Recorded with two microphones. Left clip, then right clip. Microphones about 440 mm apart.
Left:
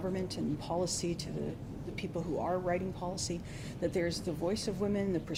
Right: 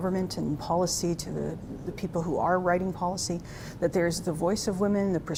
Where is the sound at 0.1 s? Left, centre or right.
Right.